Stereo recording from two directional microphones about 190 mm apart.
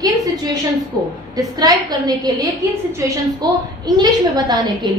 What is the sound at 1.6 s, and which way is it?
A woman's voice, 20° right (ahead or behind).